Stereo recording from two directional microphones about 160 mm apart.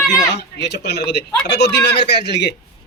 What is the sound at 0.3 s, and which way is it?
Speech, 90° left.